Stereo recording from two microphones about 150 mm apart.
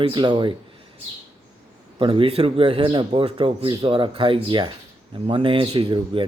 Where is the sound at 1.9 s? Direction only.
35° right (ahead or behind).